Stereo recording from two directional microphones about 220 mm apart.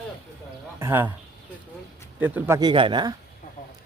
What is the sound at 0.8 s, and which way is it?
Speech, 10° right (ahead or behind).